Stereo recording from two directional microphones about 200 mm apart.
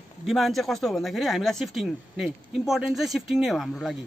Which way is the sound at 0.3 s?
Centre (ahead or behind).